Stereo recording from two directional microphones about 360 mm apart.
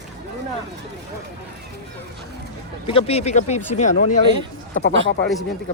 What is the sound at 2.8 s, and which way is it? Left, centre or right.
Speech, centre.